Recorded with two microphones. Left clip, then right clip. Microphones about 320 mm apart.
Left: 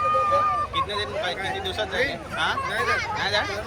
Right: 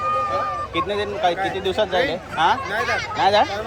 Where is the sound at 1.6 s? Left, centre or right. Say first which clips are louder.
Right 8 dB; right.